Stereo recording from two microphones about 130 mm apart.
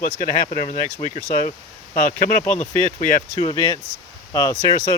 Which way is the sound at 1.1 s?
90° left.